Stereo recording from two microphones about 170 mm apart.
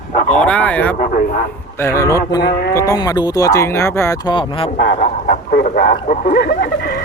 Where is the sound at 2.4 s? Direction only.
70° left (ahead or behind).